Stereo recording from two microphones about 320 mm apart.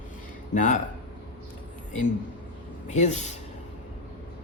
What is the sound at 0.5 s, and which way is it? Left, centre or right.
Speech, left.